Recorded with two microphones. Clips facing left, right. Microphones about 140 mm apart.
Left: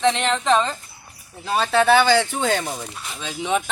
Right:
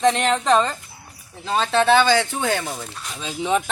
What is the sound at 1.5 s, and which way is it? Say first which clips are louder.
Speech: even; 10° left (ahead or behind).